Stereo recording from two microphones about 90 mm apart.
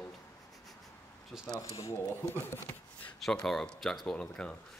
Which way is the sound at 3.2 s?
5° left (ahead or behind).